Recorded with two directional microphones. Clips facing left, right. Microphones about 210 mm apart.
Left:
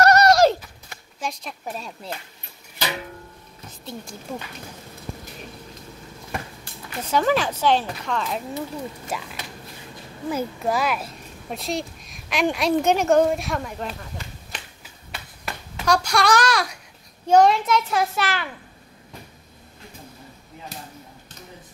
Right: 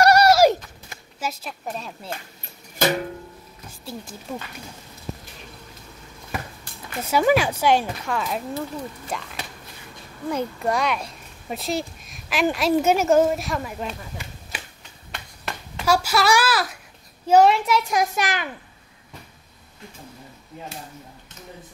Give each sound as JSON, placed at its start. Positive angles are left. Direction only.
{"t": 0.0, "sound": "horse", "side_deg": -10}
{"t": 1.2, "sound": "speech", "side_deg": -5}
{"t": 2.8, "sound": "music", "side_deg": -45}
{"t": 3.8, "sound": "speech", "side_deg": -5}
{"t": 7.0, "sound": "a child's voice", "side_deg": -10}
{"t": 10.3, "sound": "speech", "side_deg": 5}
{"t": 14.8, "sound": "finger snapping", "side_deg": 5}
{"t": 15.8, "sound": "a child's voice", "side_deg": -5}